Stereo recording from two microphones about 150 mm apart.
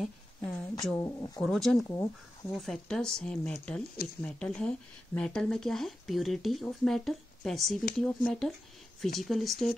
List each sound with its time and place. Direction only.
0.0 s a woman's voice: centre (ahead or behind)
0.9 s speech: 20° left (ahead or behind)
1.4 s speech: centre (ahead or behind)